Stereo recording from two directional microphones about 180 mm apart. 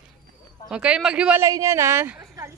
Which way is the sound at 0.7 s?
5° right (ahead or behind).